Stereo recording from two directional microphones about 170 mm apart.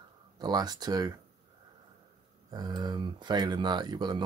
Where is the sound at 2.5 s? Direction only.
25° right (ahead or behind).